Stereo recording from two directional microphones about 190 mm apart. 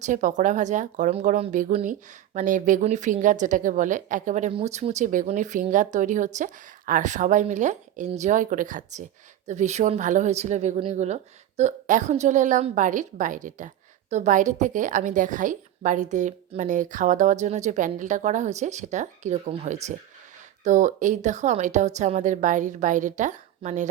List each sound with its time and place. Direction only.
0.0 s a woman's voice: 40° right (ahead or behind)